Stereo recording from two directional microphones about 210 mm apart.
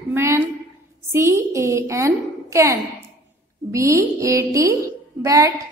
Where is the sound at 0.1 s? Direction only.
10° right (ahead or behind).